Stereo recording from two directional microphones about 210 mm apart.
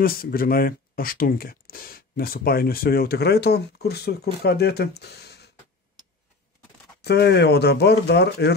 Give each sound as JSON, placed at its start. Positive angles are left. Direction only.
{"t": 0.0, "sound": "speech", "side_deg": 45}
{"t": 7.0, "sound": "speech", "side_deg": 50}